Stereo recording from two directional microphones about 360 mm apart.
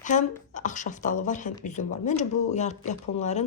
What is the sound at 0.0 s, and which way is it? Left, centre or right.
Speech, left.